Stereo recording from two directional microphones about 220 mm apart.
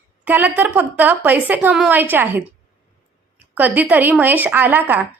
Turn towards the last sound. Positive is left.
turn(degrees=-10)  # may be behind; listen again after turning